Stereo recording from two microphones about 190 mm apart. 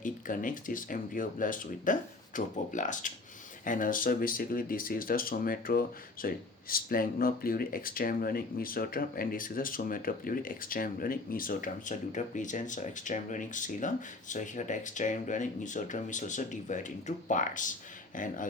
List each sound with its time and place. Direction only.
0.0 s speech: 45° left (ahead or behind)